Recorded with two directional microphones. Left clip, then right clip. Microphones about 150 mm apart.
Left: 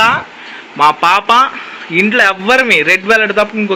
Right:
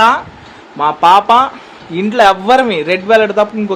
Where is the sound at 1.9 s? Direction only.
5° right (ahead or behind).